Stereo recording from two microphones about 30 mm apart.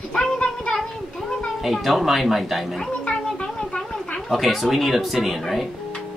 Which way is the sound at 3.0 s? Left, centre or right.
Left.